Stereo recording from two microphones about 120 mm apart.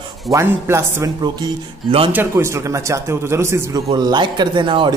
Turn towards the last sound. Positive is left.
turn(degrees=-45)  # may be behind; listen again after turning